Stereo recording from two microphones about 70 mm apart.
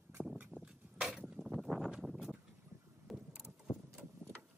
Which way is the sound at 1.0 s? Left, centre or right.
Centre.